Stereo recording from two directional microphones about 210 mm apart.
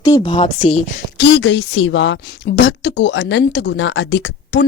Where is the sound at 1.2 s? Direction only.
60° left (ahead or behind).